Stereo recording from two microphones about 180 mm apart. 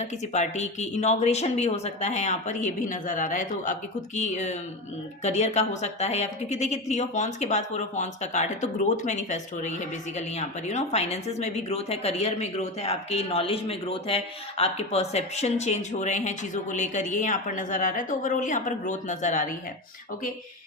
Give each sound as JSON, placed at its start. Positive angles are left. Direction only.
{"t": 0.0, "sound": "speech", "side_deg": 40}